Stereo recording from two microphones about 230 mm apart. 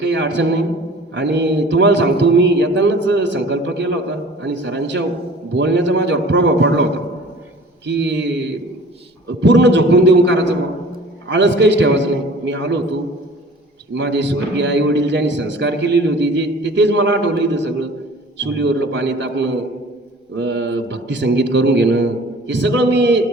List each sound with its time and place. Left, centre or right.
0.0 s a man's voice: right
7.9 s a man's voice: right
9.4 s a man's voice: right
13.9 s a man's voice: right